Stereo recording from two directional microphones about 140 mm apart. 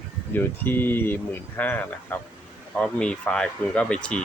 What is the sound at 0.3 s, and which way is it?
Speech, 15° left (ahead or behind).